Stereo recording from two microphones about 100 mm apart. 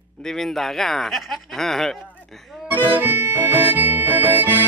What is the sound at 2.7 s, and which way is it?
Harmonica, 20° right (ahead or behind).